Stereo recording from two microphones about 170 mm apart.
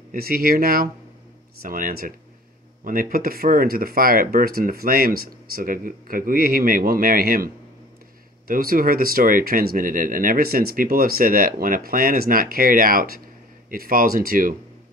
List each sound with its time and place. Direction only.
0.1 s speech: 60° right (ahead or behind)